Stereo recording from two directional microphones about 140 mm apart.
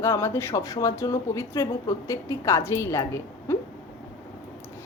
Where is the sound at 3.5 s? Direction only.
15° left (ahead or behind).